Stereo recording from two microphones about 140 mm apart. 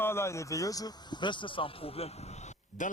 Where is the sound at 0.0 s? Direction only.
20° left (ahead or behind).